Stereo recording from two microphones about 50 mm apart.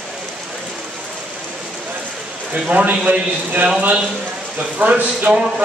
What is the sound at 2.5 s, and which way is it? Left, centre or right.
A man's voice, right.